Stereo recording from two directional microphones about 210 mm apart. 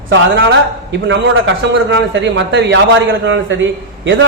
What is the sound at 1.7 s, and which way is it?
A man's voice, 60° right (ahead or behind).